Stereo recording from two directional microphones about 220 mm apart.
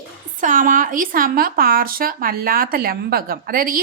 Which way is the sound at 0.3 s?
35° right (ahead or behind).